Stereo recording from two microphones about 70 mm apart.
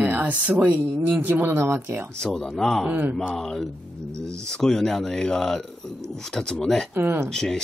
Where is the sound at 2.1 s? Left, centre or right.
Centre.